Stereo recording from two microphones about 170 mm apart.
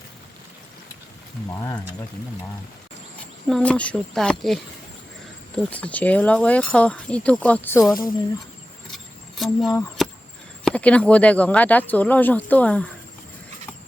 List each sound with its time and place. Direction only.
1.5 s speech: 15° left (ahead or behind)
3.5 s speech: 10° left (ahead or behind)
9.4 s speech: centre (ahead or behind)
10.0 s chop: centre (ahead or behind)
10.6 s speech: 5° left (ahead or behind)